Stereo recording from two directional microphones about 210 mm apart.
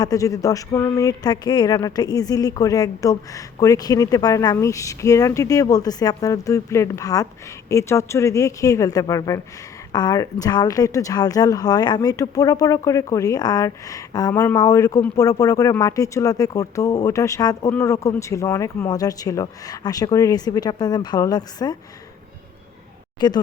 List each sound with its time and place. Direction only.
0.0 s speech: 15° left (ahead or behind)
23.2 s speech: 20° left (ahead or behind)